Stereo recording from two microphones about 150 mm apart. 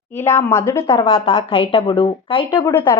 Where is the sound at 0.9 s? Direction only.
35° left (ahead or behind).